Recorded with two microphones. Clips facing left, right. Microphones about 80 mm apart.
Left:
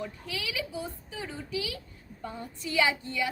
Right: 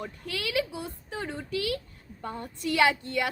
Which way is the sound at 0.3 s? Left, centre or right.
Right.